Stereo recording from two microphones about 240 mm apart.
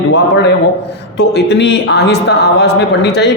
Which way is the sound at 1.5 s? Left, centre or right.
Left.